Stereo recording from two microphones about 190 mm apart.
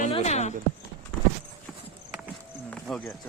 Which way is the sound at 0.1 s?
35° left (ahead or behind).